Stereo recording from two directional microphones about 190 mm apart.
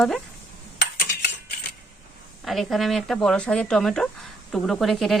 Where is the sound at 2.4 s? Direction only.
Centre (ahead or behind).